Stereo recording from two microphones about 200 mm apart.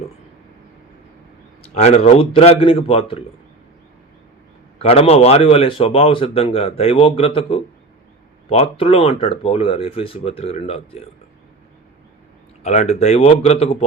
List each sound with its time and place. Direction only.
1.6 s speech: 30° left (ahead or behind)
4.8 s speech: 30° left (ahead or behind)
12.6 s speech: 35° left (ahead or behind)